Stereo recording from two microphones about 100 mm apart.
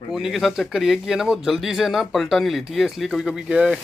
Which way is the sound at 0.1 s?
Centre (ahead or behind).